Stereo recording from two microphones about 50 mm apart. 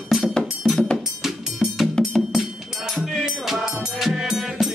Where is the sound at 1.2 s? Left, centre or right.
Centre.